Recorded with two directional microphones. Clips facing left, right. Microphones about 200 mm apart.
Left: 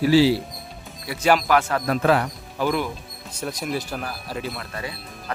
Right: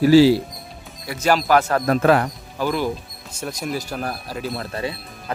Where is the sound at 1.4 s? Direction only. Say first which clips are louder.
Right 3 dB; 40° right (ahead or behind).